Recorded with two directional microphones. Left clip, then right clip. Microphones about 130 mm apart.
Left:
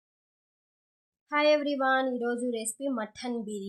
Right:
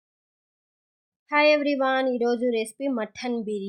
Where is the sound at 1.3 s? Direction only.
50° right (ahead or behind).